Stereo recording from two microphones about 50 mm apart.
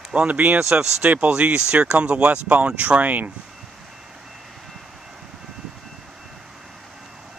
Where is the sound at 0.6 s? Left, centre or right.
Centre.